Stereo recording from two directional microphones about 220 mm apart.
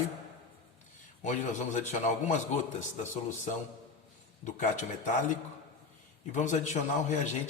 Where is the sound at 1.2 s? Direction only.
35° left (ahead or behind).